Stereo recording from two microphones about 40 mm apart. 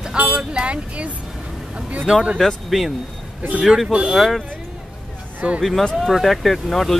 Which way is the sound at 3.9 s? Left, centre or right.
Right.